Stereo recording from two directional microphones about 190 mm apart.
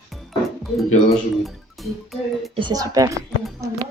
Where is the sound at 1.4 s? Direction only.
Centre (ahead or behind).